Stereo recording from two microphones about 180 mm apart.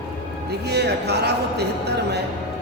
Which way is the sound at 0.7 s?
65° right (ahead or behind).